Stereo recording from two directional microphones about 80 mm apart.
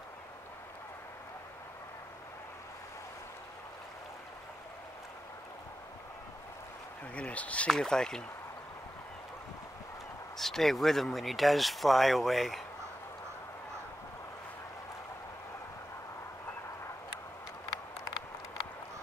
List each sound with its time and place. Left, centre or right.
7.2 s speech: centre
10.3 s speech: centre